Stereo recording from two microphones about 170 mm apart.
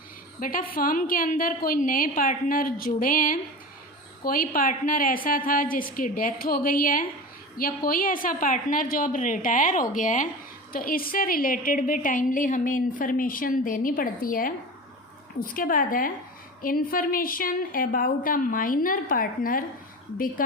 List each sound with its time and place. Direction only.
0.3 s a woman's voice: 55° left (ahead or behind)